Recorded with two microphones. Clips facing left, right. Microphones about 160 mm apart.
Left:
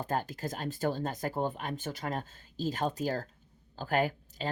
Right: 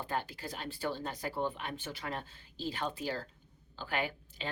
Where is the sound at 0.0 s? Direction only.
45° left (ahead or behind).